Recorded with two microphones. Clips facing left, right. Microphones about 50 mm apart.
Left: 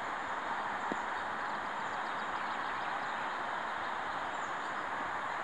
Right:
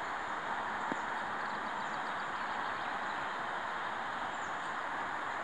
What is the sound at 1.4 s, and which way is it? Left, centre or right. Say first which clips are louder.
Vehicle: even; left.